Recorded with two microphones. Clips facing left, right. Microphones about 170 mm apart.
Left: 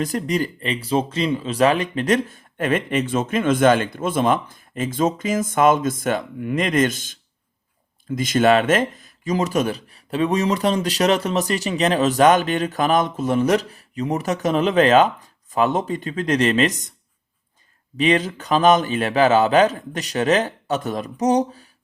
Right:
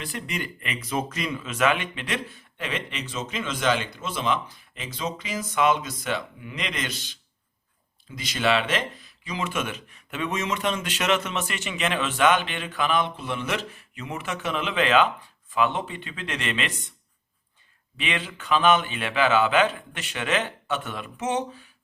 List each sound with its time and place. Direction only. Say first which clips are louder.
0.0 s speech: left 11 dB; 40° left (ahead or behind)
17.9 s speech: left 12 dB; 40° left (ahead or behind)